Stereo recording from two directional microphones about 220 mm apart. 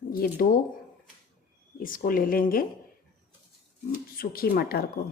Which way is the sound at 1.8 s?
40° left (ahead or behind).